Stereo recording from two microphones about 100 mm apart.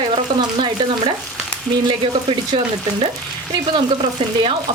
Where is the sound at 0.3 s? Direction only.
50° right (ahead or behind).